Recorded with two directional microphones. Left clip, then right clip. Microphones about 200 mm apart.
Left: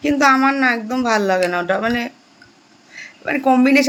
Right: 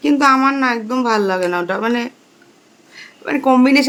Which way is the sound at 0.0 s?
10° right (ahead or behind).